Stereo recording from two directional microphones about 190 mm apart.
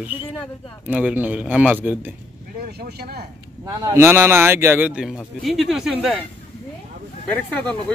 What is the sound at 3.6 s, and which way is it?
A man's voice, 15° right (ahead or behind).